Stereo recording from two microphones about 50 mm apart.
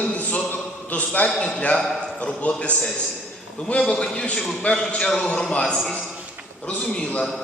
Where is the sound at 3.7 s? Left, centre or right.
Centre.